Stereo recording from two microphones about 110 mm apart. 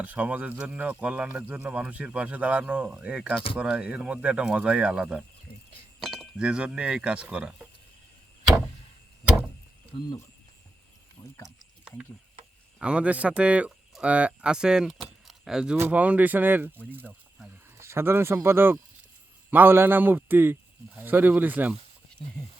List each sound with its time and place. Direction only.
0.0 s speech: 15° right (ahead or behind)
6.0 s chink: 5° left (ahead or behind)
6.4 s speech: 10° right (ahead or behind)
11.4 s a sound: 10° right (ahead or behind)
12.8 s speech: 10° right (ahead or behind)